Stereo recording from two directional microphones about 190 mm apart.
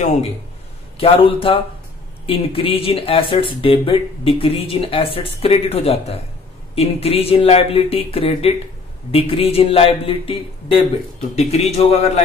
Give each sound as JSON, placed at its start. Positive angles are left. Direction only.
{"t": 0.9, "sound": "a man's voice", "side_deg": 30}